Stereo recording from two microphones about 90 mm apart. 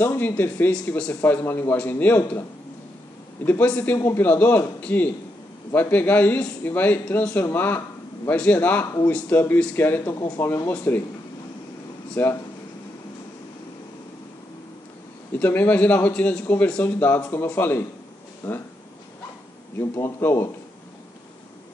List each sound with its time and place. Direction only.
0.0 s a man's voice: 25° left (ahead or behind)
3.4 s a man's voice: 20° left (ahead or behind)
10.7 s speech: 15° left (ahead or behind)
12.2 s a man's voice: 20° left (ahead or behind)
15.3 s a man's voice: 20° left (ahead or behind)
19.8 s a man's voice: 25° left (ahead or behind)